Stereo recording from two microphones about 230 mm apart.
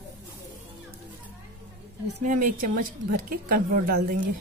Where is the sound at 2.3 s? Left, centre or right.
Right.